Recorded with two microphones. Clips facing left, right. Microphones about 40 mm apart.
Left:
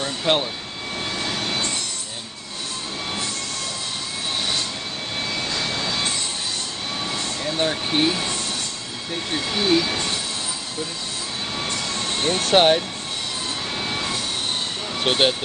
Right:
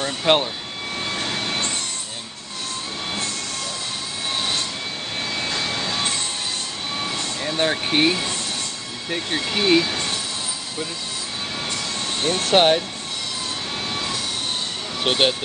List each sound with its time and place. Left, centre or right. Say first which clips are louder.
0.0 s jet engine: right 2 dB; right
7.4 s a sound: right 2 dB; centre
9.6 s speech: right 2 dB; right
12.2 s speech: even; centre
15.0 s speech: even; centre